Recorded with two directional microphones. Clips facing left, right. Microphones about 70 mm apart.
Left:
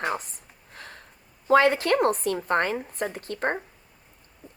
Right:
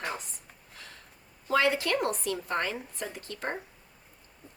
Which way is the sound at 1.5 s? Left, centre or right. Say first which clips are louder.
Left 7 dB; left.